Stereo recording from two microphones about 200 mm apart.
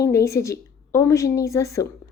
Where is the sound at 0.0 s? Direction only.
15° left (ahead or behind).